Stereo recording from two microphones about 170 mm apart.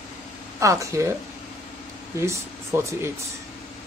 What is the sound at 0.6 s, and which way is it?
Speech, 20° right (ahead or behind).